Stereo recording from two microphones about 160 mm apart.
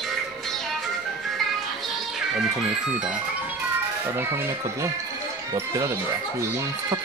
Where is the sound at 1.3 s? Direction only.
Centre (ahead or behind).